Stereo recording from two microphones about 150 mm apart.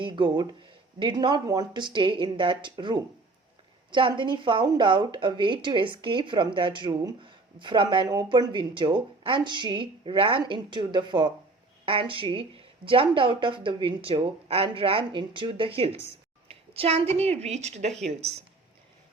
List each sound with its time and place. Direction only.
0.0 s a woman's voice: 30° right (ahead or behind)